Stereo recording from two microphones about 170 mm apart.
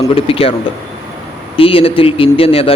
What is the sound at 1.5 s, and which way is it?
A man's voice, 35° left (ahead or behind).